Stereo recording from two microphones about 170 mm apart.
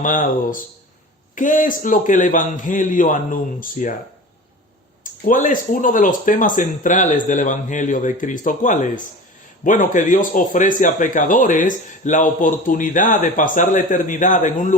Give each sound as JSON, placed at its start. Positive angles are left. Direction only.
{"t": 0.0, "sound": "speech", "side_deg": 50}
{"t": 5.2, "sound": "speech", "side_deg": 50}